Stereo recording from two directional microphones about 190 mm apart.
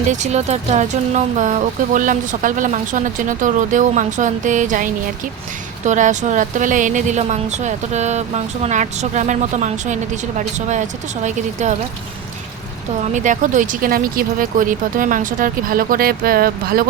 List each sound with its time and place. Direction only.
0.1 s a woman's voice: 35° right (ahead or behind)
13.1 s speech: 40° right (ahead or behind)